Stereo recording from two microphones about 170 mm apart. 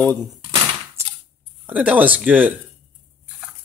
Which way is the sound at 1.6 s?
10° right (ahead or behind).